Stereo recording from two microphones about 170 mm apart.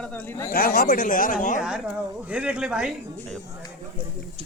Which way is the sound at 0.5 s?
60° left (ahead or behind).